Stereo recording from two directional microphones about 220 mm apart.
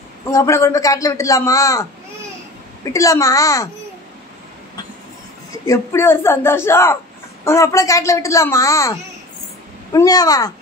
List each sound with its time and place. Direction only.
0.3 s a man's voice: 15° left (ahead or behind)
5.7 s a man's voice: 10° left (ahead or behind)
9.9 s a man's voice: 15° left (ahead or behind)